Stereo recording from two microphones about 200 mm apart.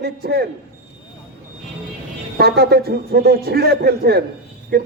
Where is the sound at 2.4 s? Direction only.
50° right (ahead or behind).